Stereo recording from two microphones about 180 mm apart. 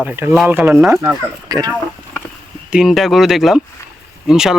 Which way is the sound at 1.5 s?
20° right (ahead or behind).